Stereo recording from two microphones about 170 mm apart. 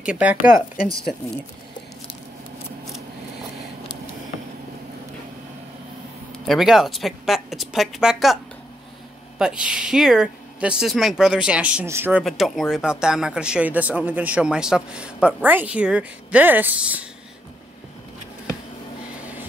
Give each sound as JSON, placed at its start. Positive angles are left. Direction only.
{"t": 0.0, "sound": "speech", "side_deg": -5}
{"t": 6.4, "sound": "speech", "side_deg": 0}
{"t": 9.4, "sound": "speech", "side_deg": -5}